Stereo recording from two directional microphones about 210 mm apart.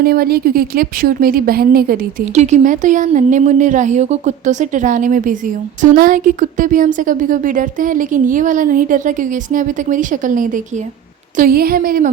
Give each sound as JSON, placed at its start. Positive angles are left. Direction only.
{"t": 0.0, "sound": "a woman's voice", "side_deg": -45}